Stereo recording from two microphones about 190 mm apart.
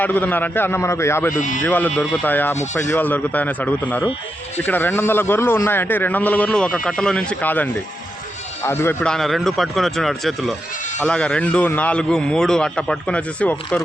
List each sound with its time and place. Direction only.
0.0 s a man's voice: 10° left (ahead or behind)
1.4 s speech: 45° left (ahead or behind)
1.6 s a man's voice: 10° left (ahead or behind)